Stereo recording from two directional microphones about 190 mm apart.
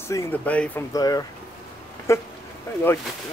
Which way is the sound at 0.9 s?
20° left (ahead or behind).